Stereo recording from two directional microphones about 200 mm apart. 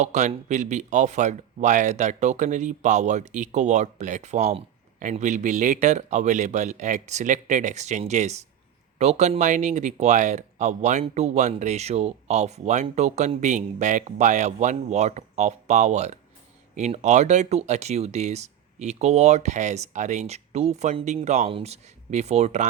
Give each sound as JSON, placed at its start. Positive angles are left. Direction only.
{"t": 0.0, "sound": "speech", "side_deg": -35}